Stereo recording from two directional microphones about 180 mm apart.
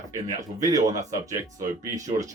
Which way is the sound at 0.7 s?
20° right (ahead or behind).